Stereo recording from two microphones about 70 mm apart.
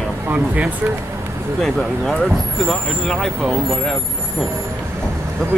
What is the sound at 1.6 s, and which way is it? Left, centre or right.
Speech, centre.